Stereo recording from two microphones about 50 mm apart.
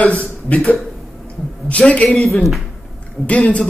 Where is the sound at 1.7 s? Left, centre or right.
Left.